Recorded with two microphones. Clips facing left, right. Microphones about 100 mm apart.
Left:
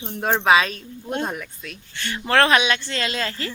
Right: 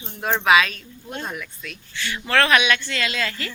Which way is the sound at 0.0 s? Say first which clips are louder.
Left 2 dB; 35° left (ahead or behind).